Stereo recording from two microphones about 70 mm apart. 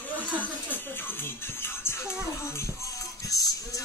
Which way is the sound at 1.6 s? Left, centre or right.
Left.